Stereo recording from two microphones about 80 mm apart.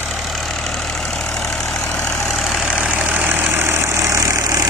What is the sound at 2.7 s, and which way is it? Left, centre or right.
Vehicle, centre.